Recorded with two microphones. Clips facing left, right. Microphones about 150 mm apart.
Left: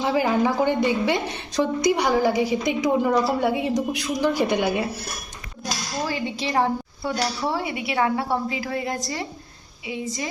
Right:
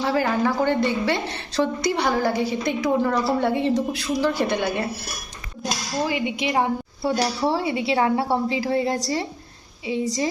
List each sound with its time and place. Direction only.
0.0 s a woman's voice: 15° left (ahead or behind)
5.6 s speech: 15° right (ahead or behind)
7.0 s a woman's voice: 30° right (ahead or behind)